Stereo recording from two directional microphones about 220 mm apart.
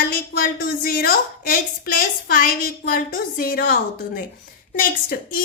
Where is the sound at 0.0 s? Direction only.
40° left (ahead or behind).